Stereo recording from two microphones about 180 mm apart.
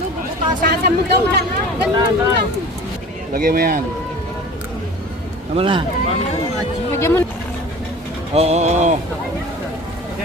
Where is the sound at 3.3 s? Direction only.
55° right (ahead or behind).